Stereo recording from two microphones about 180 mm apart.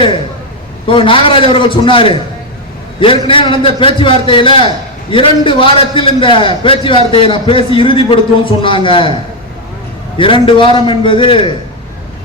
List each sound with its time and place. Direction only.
0.9 s a man's voice: 30° left (ahead or behind)
10.2 s a man's voice: 30° left (ahead or behind)